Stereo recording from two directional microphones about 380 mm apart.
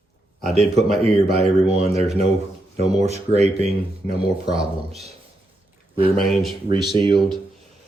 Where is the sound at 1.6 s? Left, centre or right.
Centre.